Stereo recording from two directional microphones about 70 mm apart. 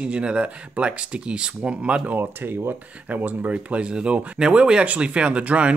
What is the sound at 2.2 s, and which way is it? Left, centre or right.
Speech, right.